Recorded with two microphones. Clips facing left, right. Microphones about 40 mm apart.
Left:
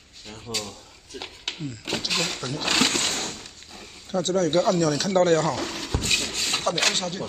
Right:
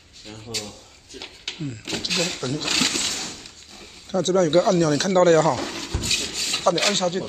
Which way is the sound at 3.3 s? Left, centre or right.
Centre.